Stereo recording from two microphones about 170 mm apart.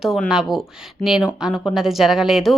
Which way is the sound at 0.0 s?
Centre (ahead or behind).